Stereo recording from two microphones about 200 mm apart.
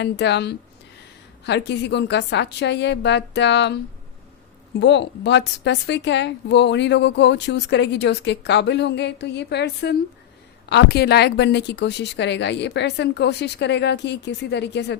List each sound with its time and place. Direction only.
0.0 s a woman's voice: 60° left (ahead or behind)
4.8 s a woman's voice: 60° left (ahead or behind)